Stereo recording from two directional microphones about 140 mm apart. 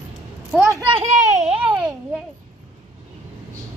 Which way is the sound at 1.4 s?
45° right (ahead or behind).